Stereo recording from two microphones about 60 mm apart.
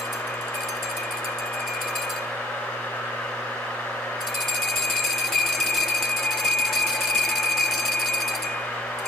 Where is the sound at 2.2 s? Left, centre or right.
Centre.